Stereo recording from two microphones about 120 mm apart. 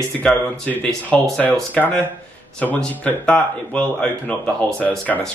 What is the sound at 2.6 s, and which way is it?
Speech, 15° left (ahead or behind).